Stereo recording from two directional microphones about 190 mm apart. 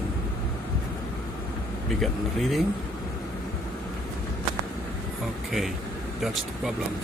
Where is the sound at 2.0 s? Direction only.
Centre (ahead or behind).